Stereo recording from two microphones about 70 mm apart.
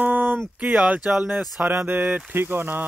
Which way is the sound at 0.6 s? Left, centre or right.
Centre.